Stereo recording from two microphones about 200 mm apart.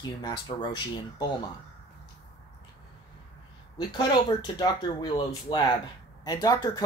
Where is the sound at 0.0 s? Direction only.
20° left (ahead or behind).